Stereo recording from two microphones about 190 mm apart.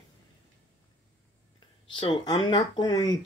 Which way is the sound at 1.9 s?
25° left (ahead or behind).